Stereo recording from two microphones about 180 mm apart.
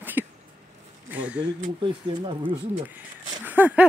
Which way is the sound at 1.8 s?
25° right (ahead or behind).